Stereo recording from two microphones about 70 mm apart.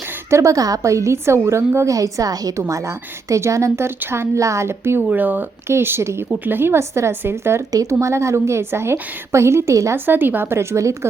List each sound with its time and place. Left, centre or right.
0.3 s a woman's voice: right
2.0 s a woman's voice: right
2.6 s a woman's voice: right
4.4 s a woman's voice: right
4.9 s speech: right
5.6 s a woman's voice: right
7.7 s a woman's voice: right
7.9 s a woman's voice: right
10.1 s a woman's voice: right